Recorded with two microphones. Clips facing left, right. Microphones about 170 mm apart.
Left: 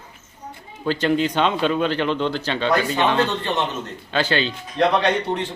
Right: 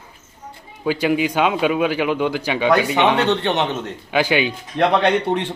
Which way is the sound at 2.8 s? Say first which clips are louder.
Right 3 dB; 75° right (ahead or behind).